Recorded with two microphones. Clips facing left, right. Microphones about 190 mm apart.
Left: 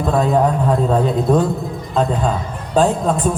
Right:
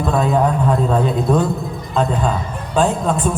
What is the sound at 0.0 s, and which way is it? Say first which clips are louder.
Speech: left 1 dB; 40° left (ahead or behind).